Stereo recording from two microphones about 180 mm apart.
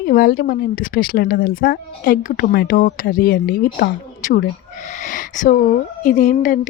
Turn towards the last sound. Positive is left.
turn(degrees=45)  # may be behind; listen again after turning